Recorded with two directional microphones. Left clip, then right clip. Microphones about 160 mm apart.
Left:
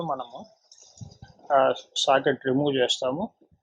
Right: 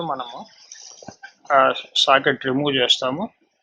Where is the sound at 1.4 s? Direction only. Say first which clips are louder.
Right 5 dB; 5° left (ahead or behind).